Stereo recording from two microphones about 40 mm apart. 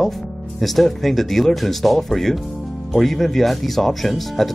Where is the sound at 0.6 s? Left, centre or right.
Centre.